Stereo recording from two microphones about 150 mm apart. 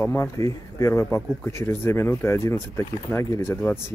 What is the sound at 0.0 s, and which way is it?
Speech, 15° left (ahead or behind).